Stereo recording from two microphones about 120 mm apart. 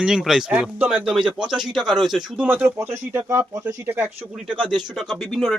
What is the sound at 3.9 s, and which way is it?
Speech, 10° right (ahead or behind).